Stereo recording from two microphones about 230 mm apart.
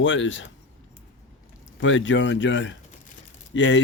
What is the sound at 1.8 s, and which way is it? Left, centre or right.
Speech, left.